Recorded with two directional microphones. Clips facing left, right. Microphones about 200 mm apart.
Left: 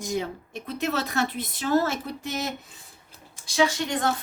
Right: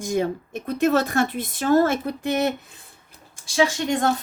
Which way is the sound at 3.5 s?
45° right (ahead or behind).